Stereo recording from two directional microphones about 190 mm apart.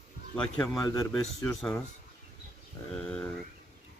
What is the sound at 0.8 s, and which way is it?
Speech, 20° left (ahead or behind).